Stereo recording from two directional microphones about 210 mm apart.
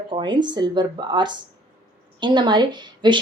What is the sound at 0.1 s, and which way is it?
A woman's voice, 20° right (ahead or behind).